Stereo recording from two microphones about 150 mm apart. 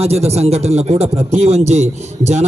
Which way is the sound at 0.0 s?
45° right (ahead or behind).